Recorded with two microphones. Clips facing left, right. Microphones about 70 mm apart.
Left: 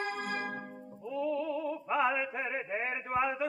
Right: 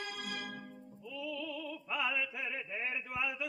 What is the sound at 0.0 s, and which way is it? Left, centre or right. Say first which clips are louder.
Music: left 7 dB; left.